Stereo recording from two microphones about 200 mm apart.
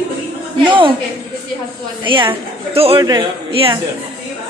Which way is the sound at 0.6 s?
25° right (ahead or behind).